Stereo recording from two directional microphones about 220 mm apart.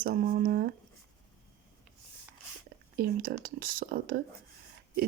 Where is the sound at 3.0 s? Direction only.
40° right (ahead or behind).